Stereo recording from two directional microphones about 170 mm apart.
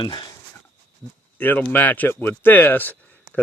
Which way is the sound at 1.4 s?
10° left (ahead or behind).